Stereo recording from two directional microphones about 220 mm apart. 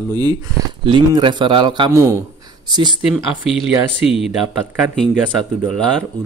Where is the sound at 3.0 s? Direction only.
Centre (ahead or behind).